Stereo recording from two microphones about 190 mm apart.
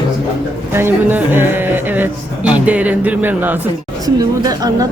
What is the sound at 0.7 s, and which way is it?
A man's voice, 10° right (ahead or behind).